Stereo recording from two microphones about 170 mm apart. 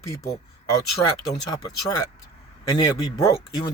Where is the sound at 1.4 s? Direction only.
25° left (ahead or behind).